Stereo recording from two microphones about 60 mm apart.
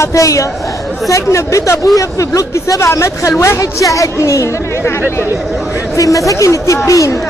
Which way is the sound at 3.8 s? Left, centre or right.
Left.